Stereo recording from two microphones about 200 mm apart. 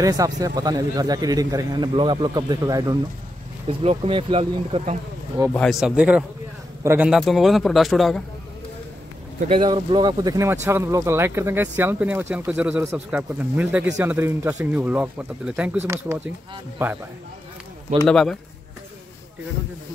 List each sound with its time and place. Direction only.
0.0 s a man's voice: 15° right (ahead or behind)
3.6 s a man's voice: 30° right (ahead or behind)
5.5 s a man's voice: 5° left (ahead or behind); by 7.1 s 15° right (ahead or behind)
7.1 s a man's voice: centre (ahead or behind)
9.5 s speech: 25° right (ahead or behind)
18.0 s a man's voice: 5° left (ahead or behind)